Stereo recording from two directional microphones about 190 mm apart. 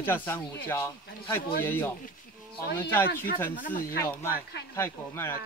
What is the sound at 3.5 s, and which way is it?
Speech, 45° left (ahead or behind).